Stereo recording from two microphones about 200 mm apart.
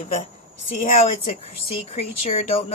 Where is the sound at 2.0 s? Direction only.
30° left (ahead or behind).